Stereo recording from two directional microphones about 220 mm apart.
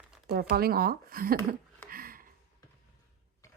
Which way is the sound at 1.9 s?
40° right (ahead or behind).